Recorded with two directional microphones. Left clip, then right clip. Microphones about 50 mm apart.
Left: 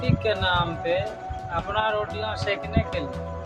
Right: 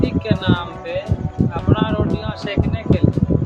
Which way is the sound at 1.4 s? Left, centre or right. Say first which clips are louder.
Right 13 dB; centre.